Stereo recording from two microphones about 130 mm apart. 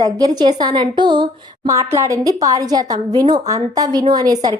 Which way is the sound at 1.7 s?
25° right (ahead or behind).